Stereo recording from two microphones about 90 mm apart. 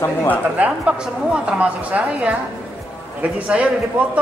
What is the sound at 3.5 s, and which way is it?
Speech, 15° right (ahead or behind).